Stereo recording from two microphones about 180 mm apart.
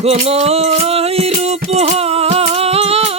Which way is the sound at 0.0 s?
35° right (ahead or behind).